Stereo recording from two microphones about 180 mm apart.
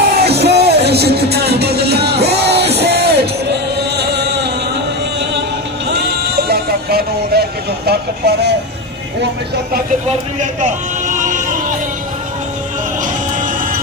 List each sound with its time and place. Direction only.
0.2 s music: 65° right (ahead or behind)
5.9 s sheep: 65° right (ahead or behind)
9.2 s speech: 55° right (ahead or behind)
10.4 s a sound: 45° right (ahead or behind)